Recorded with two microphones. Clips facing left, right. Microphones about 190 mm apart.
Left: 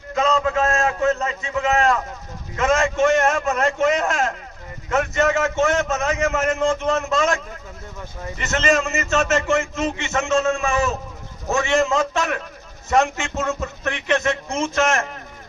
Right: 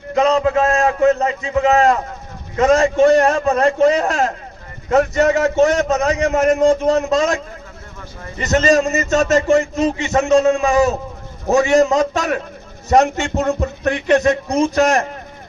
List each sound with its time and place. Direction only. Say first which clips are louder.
0.1 s a sound: right 5 dB; 35° right (ahead or behind)
0.7 s a man's voice: right 6 dB; 35° right (ahead or behind)
8.4 s a man's voice: right 6 dB; 35° right (ahead or behind)